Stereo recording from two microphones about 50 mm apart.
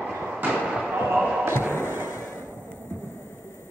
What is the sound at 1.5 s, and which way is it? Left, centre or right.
Music, left.